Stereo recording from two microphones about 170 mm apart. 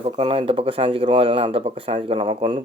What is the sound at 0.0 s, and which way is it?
Speech, 35° right (ahead or behind).